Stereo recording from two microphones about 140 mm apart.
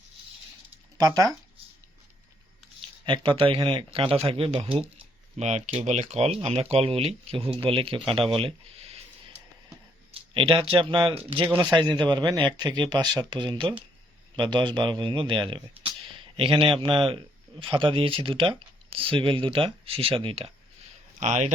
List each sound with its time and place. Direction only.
0.9 s speech: 25° right (ahead or behind)
3.1 s a man's voice: 35° right (ahead or behind)
5.4 s speech: 55° right (ahead or behind)
10.1 s a man's voice: 40° right (ahead or behind)
21.2 s speech: 55° right (ahead or behind)